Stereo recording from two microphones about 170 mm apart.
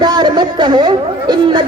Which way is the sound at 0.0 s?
25° right (ahead or behind).